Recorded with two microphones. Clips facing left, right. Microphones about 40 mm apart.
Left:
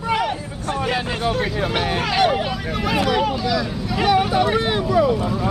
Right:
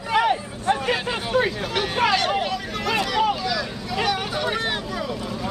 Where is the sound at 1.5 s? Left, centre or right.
Centre.